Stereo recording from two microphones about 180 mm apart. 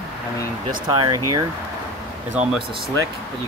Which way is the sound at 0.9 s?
25° right (ahead or behind).